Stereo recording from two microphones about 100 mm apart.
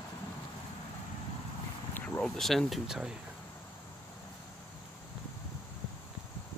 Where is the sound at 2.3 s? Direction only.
Centre (ahead or behind).